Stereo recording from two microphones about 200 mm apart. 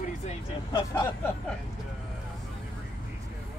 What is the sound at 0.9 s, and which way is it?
Speech, 15° left (ahead or behind).